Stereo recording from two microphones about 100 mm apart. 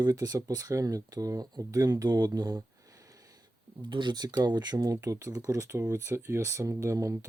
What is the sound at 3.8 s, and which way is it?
Speech, 50° right (ahead or behind).